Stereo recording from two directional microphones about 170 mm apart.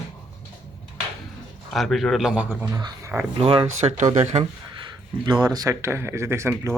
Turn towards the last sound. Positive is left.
turn(degrees=-15)  # may be behind; listen again after turning